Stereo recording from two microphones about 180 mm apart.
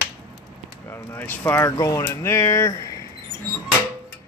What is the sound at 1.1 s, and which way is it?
Speech, 10° left (ahead or behind).